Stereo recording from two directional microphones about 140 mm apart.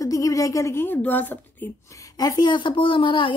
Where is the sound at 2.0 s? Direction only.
25° left (ahead or behind).